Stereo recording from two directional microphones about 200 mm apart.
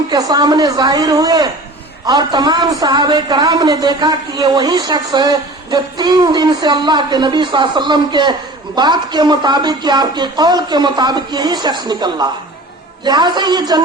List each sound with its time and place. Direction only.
0.1 s speech: 20° right (ahead or behind)